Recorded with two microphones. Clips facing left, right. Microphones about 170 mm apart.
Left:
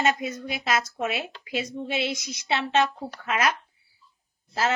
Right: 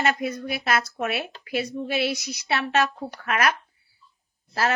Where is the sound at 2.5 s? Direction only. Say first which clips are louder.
Even; 20° left (ahead or behind).